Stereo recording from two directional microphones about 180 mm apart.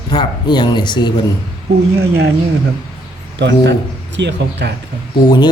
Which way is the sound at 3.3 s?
75° right (ahead or behind).